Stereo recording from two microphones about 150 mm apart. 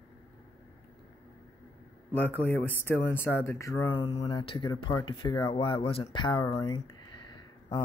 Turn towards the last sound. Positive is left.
turn(degrees=30)  # may be behind; listen again after turning